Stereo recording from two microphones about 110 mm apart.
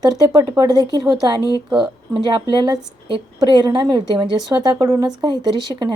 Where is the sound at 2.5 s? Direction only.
45° right (ahead or behind).